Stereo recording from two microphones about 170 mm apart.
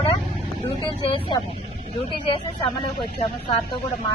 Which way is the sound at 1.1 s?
25° left (ahead or behind).